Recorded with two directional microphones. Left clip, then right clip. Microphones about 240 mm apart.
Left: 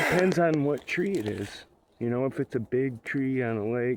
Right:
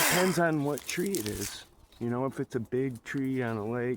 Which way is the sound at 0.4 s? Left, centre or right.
Left.